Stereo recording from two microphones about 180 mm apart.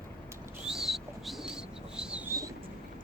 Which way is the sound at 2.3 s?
15° right (ahead or behind).